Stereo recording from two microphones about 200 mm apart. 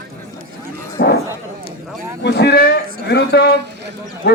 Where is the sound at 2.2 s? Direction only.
60° left (ahead or behind).